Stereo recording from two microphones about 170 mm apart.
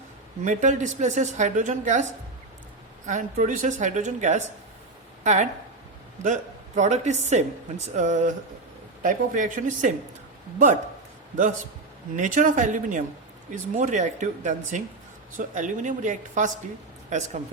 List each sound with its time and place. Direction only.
0.4 s speech: 45° right (ahead or behind)
3.1 s speech: 50° right (ahead or behind)
12.1 s speech: 50° right (ahead or behind)